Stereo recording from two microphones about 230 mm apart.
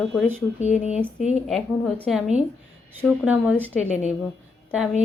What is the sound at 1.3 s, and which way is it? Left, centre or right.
A woman's voice, centre.